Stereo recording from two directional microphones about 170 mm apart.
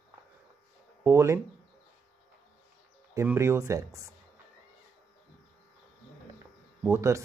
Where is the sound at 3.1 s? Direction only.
15° right (ahead or behind).